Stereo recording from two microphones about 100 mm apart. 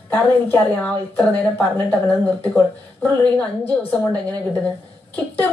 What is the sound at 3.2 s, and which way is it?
A woman's voice, 10° left (ahead or behind).